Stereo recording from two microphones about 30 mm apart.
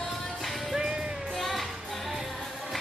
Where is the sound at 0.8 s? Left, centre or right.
Right.